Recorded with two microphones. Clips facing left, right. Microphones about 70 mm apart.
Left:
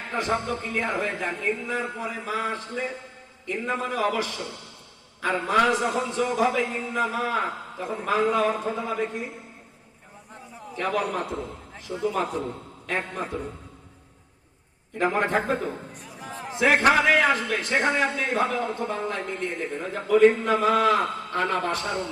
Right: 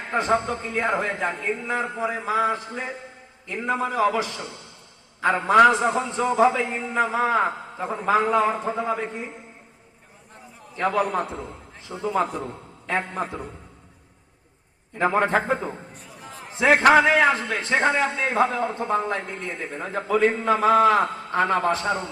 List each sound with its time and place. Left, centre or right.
0.1 s a man's voice: right
5.6 s a man's voice: right
10.8 s a man's voice: right
15.1 s a man's voice: right